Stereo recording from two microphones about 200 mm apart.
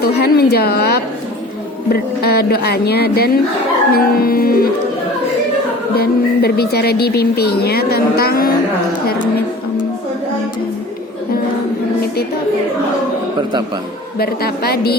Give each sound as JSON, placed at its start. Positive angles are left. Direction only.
{"t": 0.0, "sound": "speech", "side_deg": 50}
{"t": 5.9, "sound": "speech", "side_deg": 50}
{"t": 14.2, "sound": "speech", "side_deg": 50}